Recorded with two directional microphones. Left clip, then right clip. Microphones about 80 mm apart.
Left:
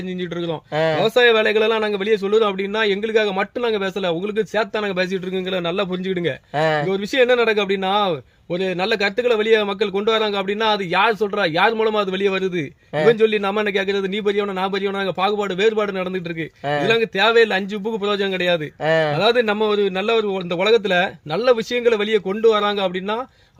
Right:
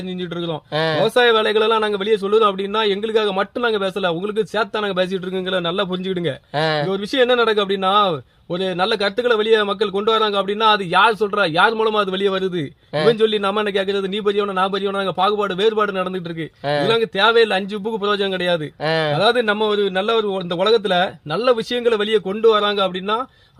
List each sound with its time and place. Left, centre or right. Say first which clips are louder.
0.8 s speech: even; centre
1.0 s a man's voice: even; right
6.6 s speech: left 1 dB; centre
6.8 s a man's voice: even; right
18.9 s speech: left 2 dB; centre
19.1 s a man's voice: right 1 dB; right